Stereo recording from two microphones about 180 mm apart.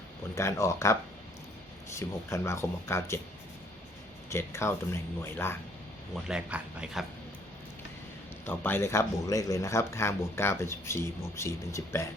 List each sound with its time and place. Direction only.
0.3 s speech: 15° left (ahead or behind)
2.0 s speech: 15° left (ahead or behind)
4.3 s speech: 15° left (ahead or behind)
6.2 s speech: 5° right (ahead or behind)
8.4 s speech: 10° left (ahead or behind)